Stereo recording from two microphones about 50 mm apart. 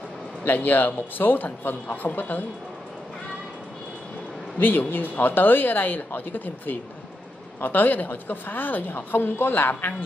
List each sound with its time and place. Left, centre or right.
0.5 s speech: left
4.6 s speech: left